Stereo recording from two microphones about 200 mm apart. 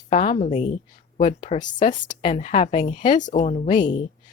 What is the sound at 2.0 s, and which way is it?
Speech, 25° left (ahead or behind).